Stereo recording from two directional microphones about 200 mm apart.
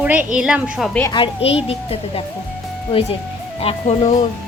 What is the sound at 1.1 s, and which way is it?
A woman's voice, 25° left (ahead or behind).